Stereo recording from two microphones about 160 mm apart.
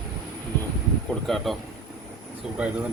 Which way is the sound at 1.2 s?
Centre (ahead or behind).